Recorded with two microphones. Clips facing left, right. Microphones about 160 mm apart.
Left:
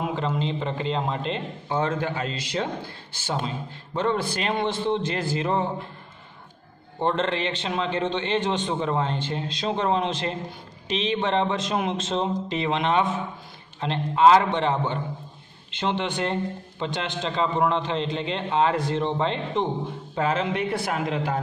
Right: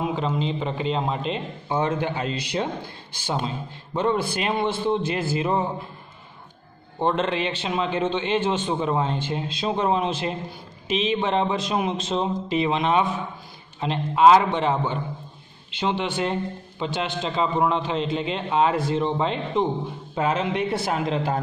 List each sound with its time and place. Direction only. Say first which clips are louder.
0.1 s a man's voice: right 1 dB; 5° right (ahead or behind); by 2.7 s 20° right (ahead or behind)
3.9 s a man's voice: right 2 dB; 10° right (ahead or behind)
7.0 s a man's voice: right 1 dB; 10° right (ahead or behind); by 21.4 s 30° right (ahead or behind)